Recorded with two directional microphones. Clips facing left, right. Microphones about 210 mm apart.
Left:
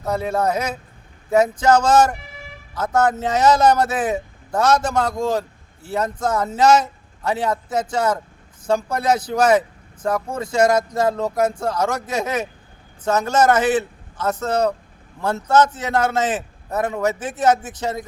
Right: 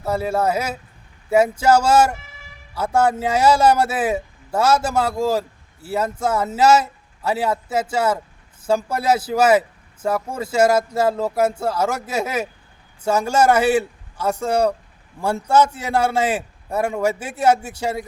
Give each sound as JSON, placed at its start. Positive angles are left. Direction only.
{"t": 0.0, "sound": "a man's voice", "side_deg": -5}